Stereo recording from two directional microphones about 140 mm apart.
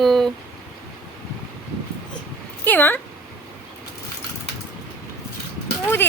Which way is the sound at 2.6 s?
15° left (ahead or behind).